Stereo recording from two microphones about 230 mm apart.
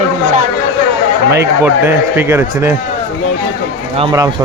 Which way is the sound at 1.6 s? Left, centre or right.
Centre.